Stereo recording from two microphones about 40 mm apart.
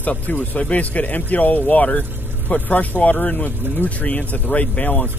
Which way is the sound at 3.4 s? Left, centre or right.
Left.